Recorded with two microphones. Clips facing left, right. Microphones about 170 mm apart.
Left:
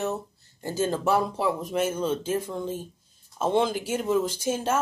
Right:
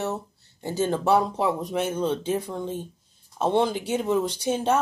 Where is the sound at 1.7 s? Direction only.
5° left (ahead or behind).